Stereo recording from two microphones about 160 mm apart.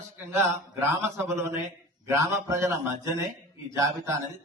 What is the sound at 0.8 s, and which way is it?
A man's voice, 15° right (ahead or behind).